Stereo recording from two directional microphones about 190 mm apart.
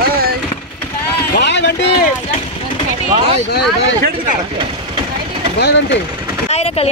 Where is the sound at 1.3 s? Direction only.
65° left (ahead or behind).